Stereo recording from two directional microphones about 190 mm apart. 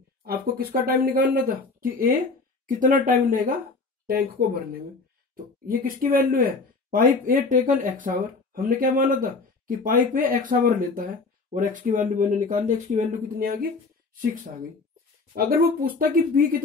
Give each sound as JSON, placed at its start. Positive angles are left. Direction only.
{"t": 0.2, "sound": "speech", "side_deg": -50}
{"t": 5.3, "sound": "speech", "side_deg": -50}